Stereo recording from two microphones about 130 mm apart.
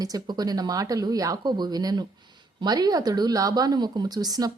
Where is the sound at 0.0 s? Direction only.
30° right (ahead or behind).